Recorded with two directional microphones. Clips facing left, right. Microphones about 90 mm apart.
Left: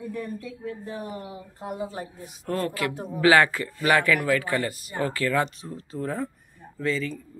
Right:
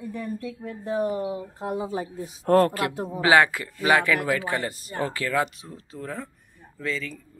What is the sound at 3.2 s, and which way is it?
Speech, 20° right (ahead or behind).